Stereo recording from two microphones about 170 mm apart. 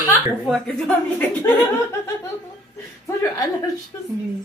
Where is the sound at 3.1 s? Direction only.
20° left (ahead or behind).